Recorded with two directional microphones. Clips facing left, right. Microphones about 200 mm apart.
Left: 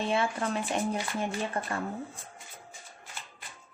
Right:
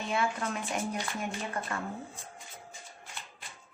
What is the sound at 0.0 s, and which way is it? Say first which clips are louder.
A woman's voice: left 3 dB; 30° left (ahead or behind).